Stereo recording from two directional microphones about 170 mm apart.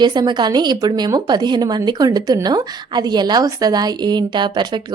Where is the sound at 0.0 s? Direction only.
25° right (ahead or behind).